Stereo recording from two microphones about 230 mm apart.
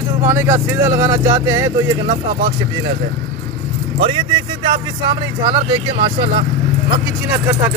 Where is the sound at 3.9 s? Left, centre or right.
Right.